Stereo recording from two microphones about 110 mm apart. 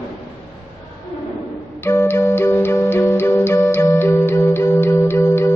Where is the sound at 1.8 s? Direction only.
20° left (ahead or behind).